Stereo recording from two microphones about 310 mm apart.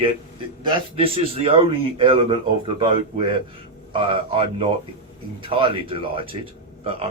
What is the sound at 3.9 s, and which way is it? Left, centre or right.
A man's voice, centre.